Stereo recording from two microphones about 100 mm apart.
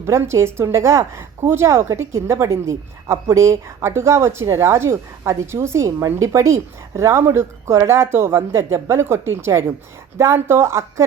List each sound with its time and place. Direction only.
0.0 s a woman's voice: 25° right (ahead or behind)